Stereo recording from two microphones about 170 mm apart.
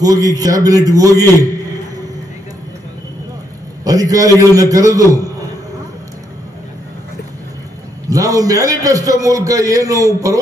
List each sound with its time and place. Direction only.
0.0 s a man's voice: 20° right (ahead or behind)
3.8 s a man's voice: 20° right (ahead or behind)
8.1 s a man's voice: 20° right (ahead or behind)